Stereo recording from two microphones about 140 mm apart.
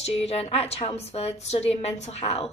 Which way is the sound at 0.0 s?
50° left (ahead or behind).